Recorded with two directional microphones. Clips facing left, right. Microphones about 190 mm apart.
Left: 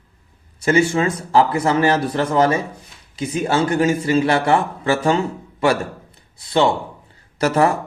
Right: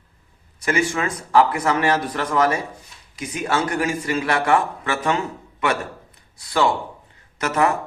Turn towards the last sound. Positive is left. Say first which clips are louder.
# left 4 dB
turn(degrees=35)  # may be behind; listen again after turning